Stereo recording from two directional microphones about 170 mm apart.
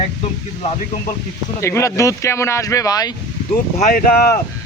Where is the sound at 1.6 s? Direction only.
15° left (ahead or behind).